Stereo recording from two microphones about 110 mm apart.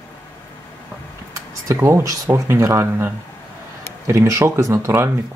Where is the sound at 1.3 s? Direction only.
30° right (ahead or behind).